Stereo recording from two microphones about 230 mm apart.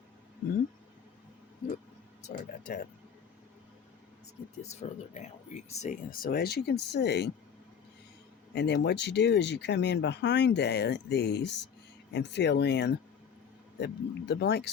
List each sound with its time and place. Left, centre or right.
2.2 s speech: left
4.6 s speech: left
8.5 s speech: left